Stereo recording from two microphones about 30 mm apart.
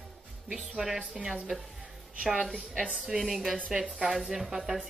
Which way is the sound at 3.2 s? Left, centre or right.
Centre.